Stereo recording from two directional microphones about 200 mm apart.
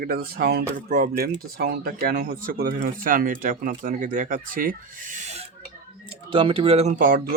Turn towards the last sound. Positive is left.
turn(degrees=-45)  # may be behind; listen again after turning